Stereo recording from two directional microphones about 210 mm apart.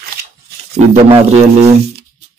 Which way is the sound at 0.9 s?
30° right (ahead or behind).